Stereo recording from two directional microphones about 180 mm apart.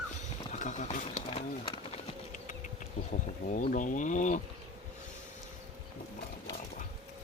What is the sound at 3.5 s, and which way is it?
Speech, 45° left (ahead or behind).